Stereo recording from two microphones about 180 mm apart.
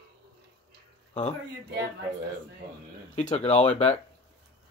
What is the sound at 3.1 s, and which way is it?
Speech, 40° left (ahead or behind).